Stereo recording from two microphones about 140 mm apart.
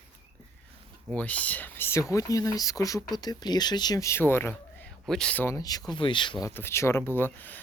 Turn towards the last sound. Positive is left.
turn(degrees=15)  # may be behind; listen again after turning